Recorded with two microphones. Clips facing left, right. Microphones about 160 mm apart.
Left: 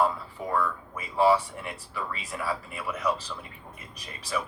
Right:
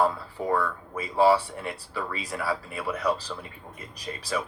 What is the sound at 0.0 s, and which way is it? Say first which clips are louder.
Speech: right 2 dB; 35° right (ahead or behind).